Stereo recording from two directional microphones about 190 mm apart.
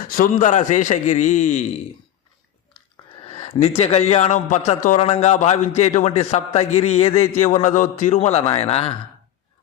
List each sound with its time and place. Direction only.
0.1 s a man's voice: 45° left (ahead or behind)
2.7 s a sound: 30° left (ahead or behind)
3.8 s a man's voice: 35° left (ahead or behind)